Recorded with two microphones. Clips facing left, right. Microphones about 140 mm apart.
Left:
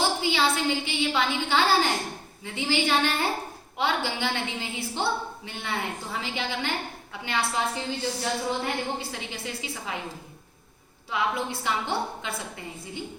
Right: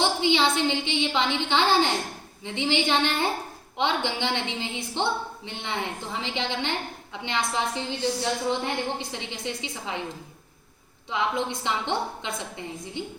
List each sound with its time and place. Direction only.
0.0 s a woman's voice: 20° right (ahead or behind)
11.1 s a woman's voice: 20° right (ahead or behind)